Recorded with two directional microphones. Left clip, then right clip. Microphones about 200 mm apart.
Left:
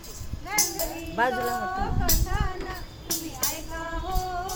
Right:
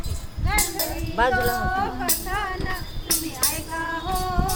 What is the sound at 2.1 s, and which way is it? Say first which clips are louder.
Music: right 4 dB; 5° left (ahead or behind).